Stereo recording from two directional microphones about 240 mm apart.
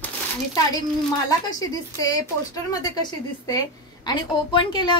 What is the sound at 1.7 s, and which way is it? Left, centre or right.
A woman's voice, centre.